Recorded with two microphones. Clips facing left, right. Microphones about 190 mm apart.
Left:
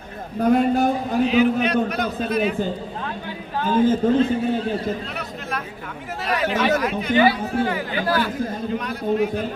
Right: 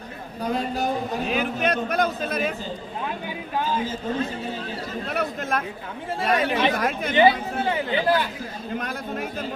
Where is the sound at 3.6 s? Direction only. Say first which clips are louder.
Left 11 dB; 55° left (ahead or behind).